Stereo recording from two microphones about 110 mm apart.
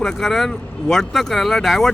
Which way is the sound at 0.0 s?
5° left (ahead or behind).